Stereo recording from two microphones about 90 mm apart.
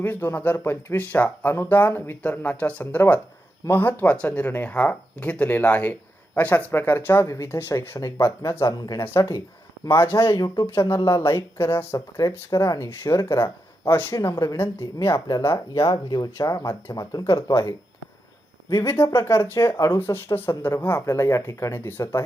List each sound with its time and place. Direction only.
0.0 s speech: 20° left (ahead or behind)
10.4 s speech: 45° left (ahead or behind)
10.8 s speech: 30° left (ahead or behind)
15.4 s speech: 35° left (ahead or behind)
16.0 s speech: 50° left (ahead or behind); by 22.2 s 25° left (ahead or behind)